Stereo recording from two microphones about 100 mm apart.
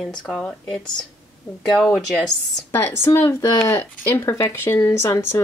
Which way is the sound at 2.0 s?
5° left (ahead or behind).